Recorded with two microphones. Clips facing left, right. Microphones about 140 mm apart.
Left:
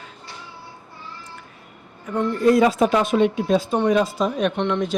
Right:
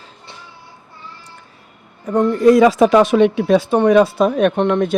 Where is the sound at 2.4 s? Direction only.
90° right.